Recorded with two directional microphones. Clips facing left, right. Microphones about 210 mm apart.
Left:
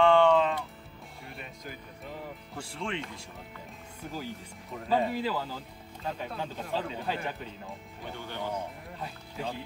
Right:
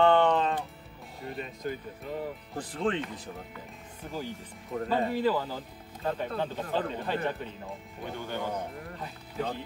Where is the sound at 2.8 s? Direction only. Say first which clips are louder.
Right 6 dB; 35° right (ahead or behind).